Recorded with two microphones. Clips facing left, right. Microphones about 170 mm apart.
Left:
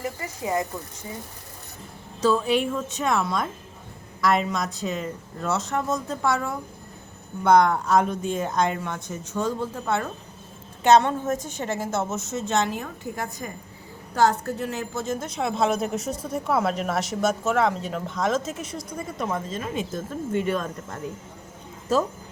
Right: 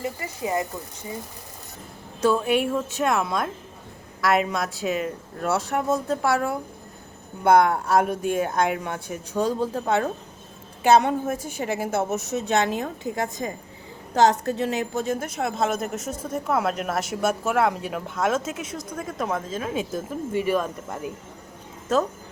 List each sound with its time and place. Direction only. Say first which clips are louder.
0.0 s a woman's voice: right 1 dB; 15° right (ahead or behind)
2.2 s a woman's voice: right 1 dB; 10° right (ahead or behind)
8.3 s speech: right 2 dB; 55° right (ahead or behind)
8.8 s a woman's voice: right 1 dB; 10° right (ahead or behind)
14.4 s a woman's voice: right 4 dB; 75° right (ahead or behind)
15.2 s speech: left 1 dB; 5° right (ahead or behind)